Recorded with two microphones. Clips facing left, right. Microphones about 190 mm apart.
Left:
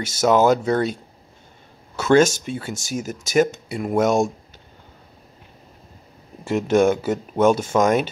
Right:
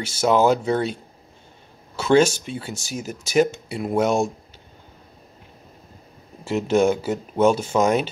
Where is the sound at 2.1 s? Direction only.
45° left (ahead or behind).